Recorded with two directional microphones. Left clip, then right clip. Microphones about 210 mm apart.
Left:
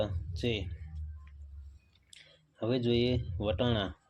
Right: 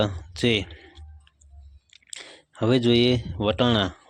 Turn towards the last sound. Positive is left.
turn(degrees=-30)  # may be behind; listen again after turning